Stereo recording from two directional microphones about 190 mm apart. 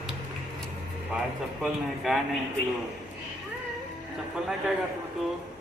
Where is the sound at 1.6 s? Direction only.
Centre (ahead or behind).